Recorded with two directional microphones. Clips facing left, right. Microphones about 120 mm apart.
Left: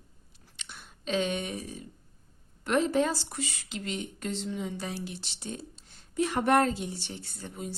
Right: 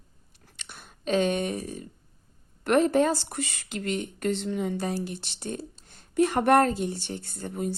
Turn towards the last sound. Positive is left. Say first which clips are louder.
# right 8 dB
turn(degrees=-50)  # may be behind; listen again after turning